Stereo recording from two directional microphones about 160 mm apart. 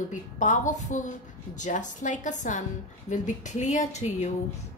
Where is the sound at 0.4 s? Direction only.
50° left (ahead or behind).